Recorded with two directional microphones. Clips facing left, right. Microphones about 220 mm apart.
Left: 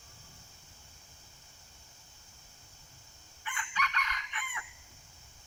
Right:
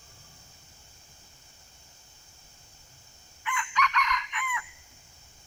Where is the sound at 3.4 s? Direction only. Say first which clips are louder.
Right 8 dB; 30° left (ahead or behind).